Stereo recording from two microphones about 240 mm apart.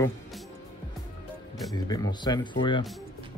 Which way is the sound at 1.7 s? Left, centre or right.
Centre.